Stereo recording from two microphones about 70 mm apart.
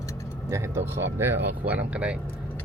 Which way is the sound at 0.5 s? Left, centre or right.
Right.